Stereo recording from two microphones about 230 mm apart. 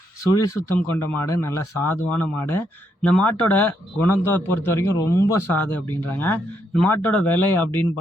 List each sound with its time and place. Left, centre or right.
0.3 s speech: centre